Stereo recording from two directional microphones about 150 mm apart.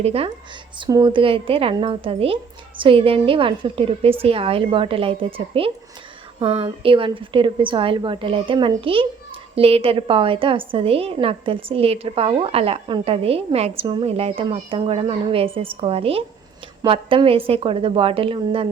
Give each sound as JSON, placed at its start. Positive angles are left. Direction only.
{"t": 0.0, "sound": "a woman's voice", "side_deg": -40}
{"t": 0.8, "sound": "a woman's voice", "side_deg": -30}